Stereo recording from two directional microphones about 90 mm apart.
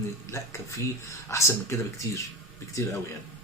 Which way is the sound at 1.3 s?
35° left (ahead or behind).